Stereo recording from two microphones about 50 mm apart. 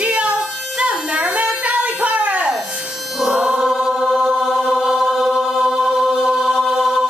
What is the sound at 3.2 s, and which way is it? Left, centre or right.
Music, centre.